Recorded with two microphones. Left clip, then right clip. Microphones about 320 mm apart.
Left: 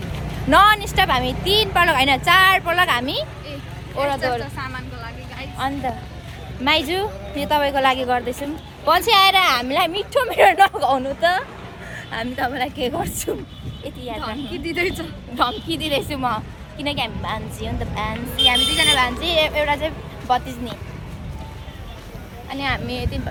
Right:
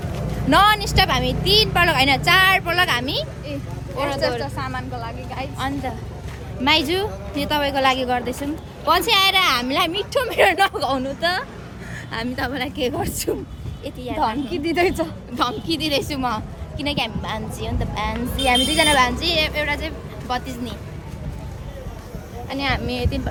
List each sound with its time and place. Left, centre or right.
0.5 s a woman's voice: centre
4.6 s a woman's voice: centre
5.5 s a woman's voice: centre
14.2 s speech: right
15.4 s a woman's voice: centre
19.6 s speech: centre
22.4 s a woman's voice: centre